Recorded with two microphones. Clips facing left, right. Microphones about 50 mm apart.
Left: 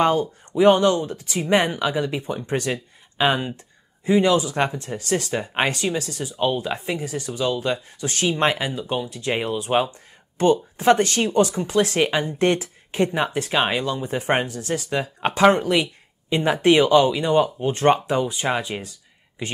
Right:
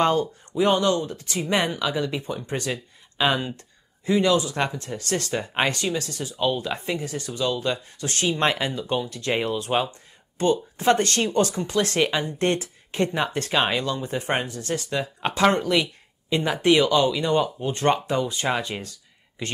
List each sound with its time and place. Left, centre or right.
0.0 s speech: centre
0.5 s speech: left; by 18.9 s centre